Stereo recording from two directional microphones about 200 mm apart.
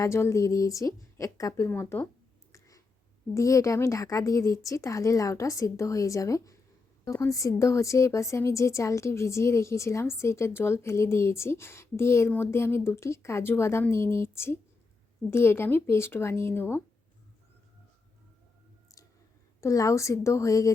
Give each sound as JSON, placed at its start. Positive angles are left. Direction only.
{"t": 0.0, "sound": "speech", "side_deg": 15}
{"t": 2.5, "sound": "a sound", "side_deg": 15}
{"t": 3.3, "sound": "speech", "side_deg": 15}
{"t": 19.6, "sound": "speech", "side_deg": 15}